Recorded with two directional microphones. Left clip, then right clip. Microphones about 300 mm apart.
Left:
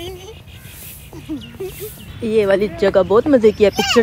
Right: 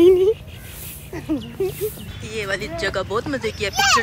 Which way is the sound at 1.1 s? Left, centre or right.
Centre.